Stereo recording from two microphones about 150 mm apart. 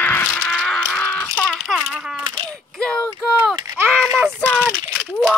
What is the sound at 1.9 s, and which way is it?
Speech, 5° right (ahead or behind).